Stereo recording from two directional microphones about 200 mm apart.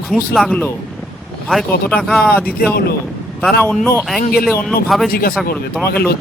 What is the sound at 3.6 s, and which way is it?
Speech, 5° left (ahead or behind).